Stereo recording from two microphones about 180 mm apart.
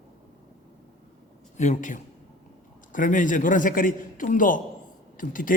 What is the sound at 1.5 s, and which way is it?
A man's voice, 40° left (ahead or behind).